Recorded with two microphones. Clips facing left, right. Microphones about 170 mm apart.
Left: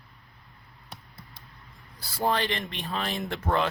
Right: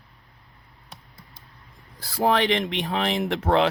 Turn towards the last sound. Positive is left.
turn(degrees=-75)  # may be behind; listen again after turning